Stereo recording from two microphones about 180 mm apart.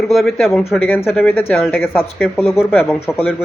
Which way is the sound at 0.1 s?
Centre (ahead or behind).